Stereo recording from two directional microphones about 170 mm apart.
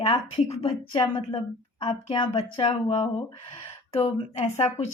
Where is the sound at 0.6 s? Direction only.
35° left (ahead or behind).